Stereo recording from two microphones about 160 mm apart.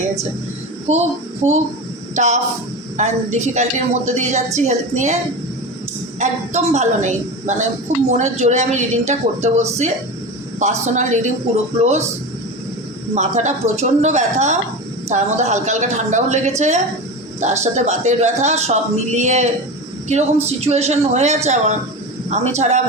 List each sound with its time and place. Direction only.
0.9 s a man's voice: 40° right (ahead or behind)
6.1 s a man's voice: 45° right (ahead or behind)
13.1 s a man's voice: 45° right (ahead or behind)
20.6 s a man's voice: 40° right (ahead or behind)